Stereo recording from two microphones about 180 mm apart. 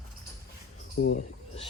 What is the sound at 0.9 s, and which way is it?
Speech, 65° left (ahead or behind).